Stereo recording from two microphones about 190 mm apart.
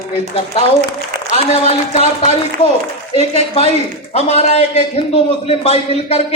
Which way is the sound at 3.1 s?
30° left (ahead or behind).